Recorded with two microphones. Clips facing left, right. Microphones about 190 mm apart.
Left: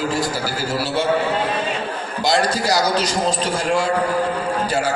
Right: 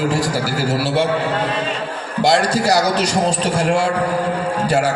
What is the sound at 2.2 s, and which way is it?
A man's voice, 70° right (ahead or behind).